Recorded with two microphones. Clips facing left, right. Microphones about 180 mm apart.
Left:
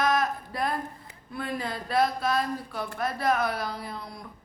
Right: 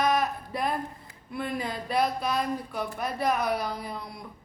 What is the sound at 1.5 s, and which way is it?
Speech, 20° right (ahead or behind).